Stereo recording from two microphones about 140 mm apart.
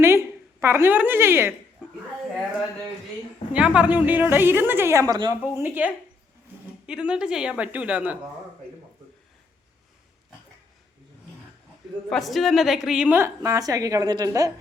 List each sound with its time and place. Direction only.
0.0 s a sound: 20° right (ahead or behind)
3.8 s a woman's voice: 10° right (ahead or behind)
12.0 s a woman's voice: centre (ahead or behind); by 14.5 s 25° right (ahead or behind)